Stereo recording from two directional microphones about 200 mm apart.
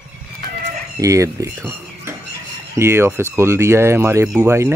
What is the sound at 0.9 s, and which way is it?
Speech, 15° right (ahead or behind).